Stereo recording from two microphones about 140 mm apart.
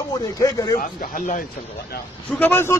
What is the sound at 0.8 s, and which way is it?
Speech, 75° left (ahead or behind).